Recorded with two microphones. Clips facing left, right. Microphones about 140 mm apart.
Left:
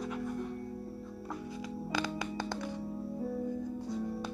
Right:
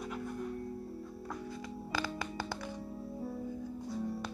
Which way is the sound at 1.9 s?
20° left (ahead or behind).